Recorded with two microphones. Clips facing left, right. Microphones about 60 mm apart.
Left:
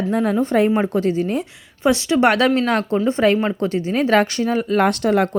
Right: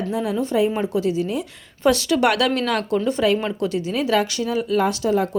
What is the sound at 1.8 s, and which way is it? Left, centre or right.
A woman's voice, left.